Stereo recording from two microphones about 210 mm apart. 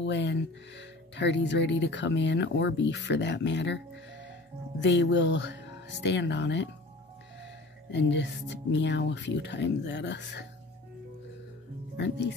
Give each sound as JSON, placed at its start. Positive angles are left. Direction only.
{"t": 0.0, "sound": "speech", "side_deg": 55}
{"t": 7.9, "sound": "speech", "side_deg": 55}
{"t": 12.0, "sound": "speech", "side_deg": 55}